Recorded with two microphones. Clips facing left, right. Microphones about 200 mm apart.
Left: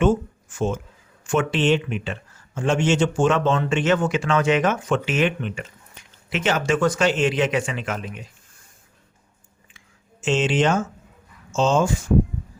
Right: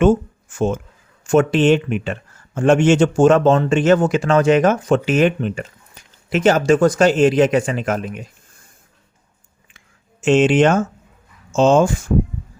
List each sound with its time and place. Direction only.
0.0 s speech: 50° right (ahead or behind)
9.7 s a sound: 55° right (ahead or behind)
11.5 s speech: 55° right (ahead or behind)